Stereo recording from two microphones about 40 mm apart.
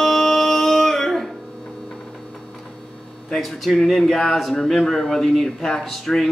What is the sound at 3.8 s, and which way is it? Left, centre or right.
Speech, centre.